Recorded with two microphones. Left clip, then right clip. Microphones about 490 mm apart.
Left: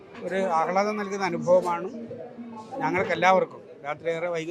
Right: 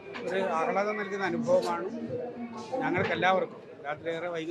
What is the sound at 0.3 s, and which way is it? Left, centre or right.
Speech, left.